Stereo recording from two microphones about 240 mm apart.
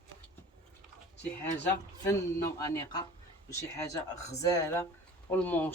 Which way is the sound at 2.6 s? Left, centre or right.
Centre.